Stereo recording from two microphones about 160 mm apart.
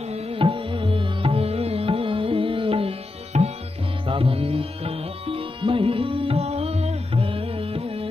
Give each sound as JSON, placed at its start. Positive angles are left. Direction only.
{"t": 0.1, "sound": "music", "side_deg": -35}